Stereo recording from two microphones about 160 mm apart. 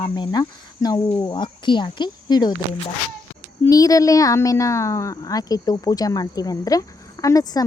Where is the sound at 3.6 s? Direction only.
20° left (ahead or behind).